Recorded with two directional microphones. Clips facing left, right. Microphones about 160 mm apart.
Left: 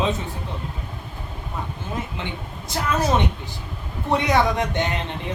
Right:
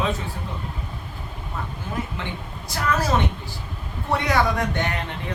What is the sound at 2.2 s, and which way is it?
Speech, 20° left (ahead or behind).